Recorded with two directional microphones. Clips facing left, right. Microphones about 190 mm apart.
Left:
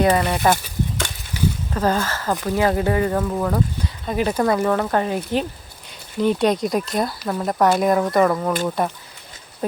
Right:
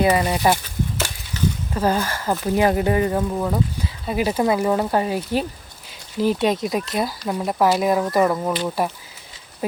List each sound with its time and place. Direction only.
0.0 s speech: 10° right (ahead or behind)
1.4 s a sound: 10° left (ahead or behind)
1.7 s speech: 10° right (ahead or behind)
3.2 s speech: 10° right (ahead or behind)